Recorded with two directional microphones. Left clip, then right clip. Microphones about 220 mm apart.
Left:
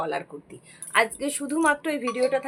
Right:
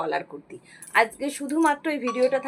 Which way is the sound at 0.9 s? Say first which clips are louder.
Right 1 dB; 15° left (ahead or behind).